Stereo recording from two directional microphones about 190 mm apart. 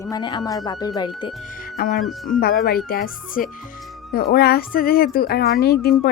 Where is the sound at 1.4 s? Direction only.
45° left (ahead or behind).